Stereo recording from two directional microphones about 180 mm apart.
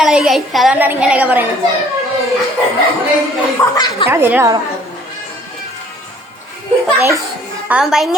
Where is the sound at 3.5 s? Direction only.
15° left (ahead or behind).